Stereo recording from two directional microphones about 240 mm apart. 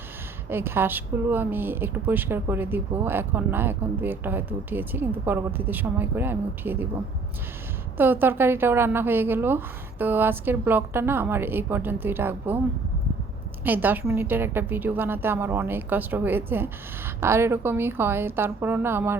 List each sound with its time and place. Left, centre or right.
0.5 s a woman's voice: centre
7.9 s a woman's voice: centre
13.7 s a woman's voice: centre